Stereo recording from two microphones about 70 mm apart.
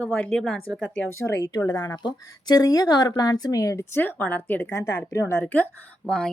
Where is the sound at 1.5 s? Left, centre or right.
Left.